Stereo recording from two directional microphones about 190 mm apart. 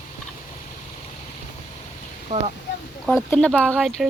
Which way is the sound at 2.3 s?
40° right (ahead or behind).